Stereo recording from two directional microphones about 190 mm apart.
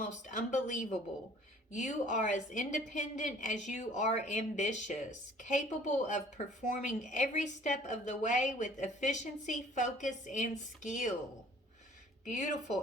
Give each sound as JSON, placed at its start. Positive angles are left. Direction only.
{"t": 0.0, "sound": "a woman's voice", "side_deg": 40}
{"t": 12.3, "sound": "a woman's voice", "side_deg": 40}